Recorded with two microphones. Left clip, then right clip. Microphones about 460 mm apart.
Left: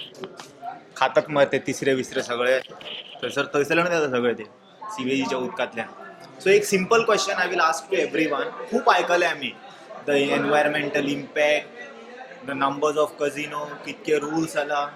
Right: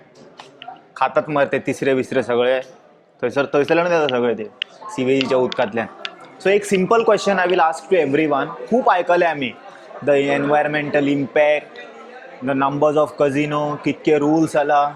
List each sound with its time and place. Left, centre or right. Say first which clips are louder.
0.9 s speech: right 2 dB; centre
4.9 s a man's voice: right 8 dB; right
12.5 s a man's voice: right 6 dB; right